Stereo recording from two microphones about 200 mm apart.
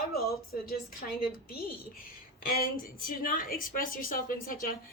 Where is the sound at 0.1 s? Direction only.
50° left (ahead or behind).